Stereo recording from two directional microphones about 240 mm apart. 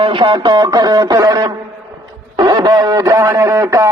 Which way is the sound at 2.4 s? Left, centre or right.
Centre.